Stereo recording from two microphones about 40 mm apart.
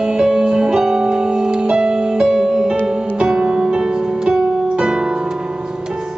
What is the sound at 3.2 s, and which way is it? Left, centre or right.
Music, right.